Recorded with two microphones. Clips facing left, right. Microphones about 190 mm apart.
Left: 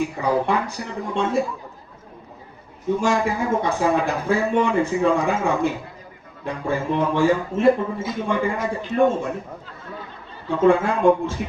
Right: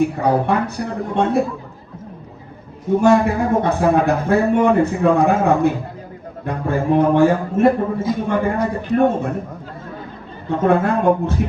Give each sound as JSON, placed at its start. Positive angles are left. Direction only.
{"t": 0.2, "sound": "a man's voice", "side_deg": -55}
{"t": 3.0, "sound": "a man's voice", "side_deg": -60}
{"t": 10.5, "sound": "a man's voice", "side_deg": -55}